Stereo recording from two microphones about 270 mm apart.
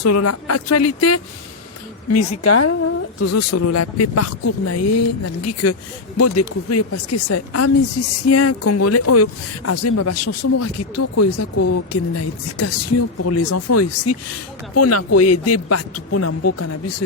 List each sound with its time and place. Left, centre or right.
0.0 s speech: left